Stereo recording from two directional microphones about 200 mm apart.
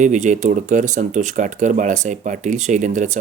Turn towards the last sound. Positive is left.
turn(degrees=-35)  # may be behind; listen again after turning